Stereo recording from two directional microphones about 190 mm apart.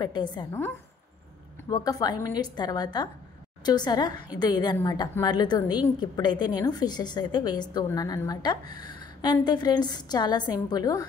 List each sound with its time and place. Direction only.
0.0 s a woman's voice: 20° left (ahead or behind)
1.7 s a woman's voice: 20° left (ahead or behind)